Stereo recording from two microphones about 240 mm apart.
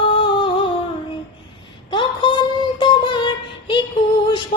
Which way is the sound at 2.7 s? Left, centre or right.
Centre.